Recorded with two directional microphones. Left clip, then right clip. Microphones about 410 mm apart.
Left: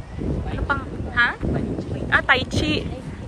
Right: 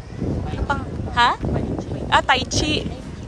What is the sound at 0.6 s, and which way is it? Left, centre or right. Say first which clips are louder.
Speech: even; centre.